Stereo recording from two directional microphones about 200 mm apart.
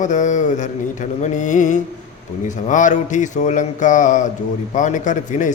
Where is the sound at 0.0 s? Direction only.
40° left (ahead or behind).